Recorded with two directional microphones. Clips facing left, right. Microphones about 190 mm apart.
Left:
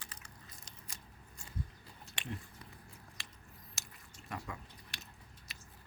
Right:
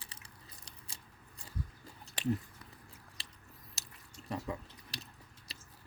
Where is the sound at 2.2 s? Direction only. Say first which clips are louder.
Right 11 dB; 40° right (ahead or behind).